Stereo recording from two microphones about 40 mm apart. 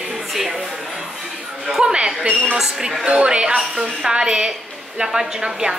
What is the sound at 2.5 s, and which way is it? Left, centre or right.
Speech, centre.